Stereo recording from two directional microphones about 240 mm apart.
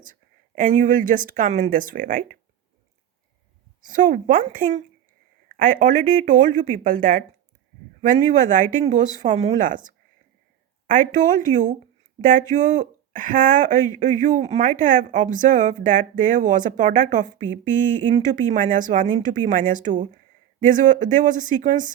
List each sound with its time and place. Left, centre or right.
0.0 s speech: right
3.8 s speech: right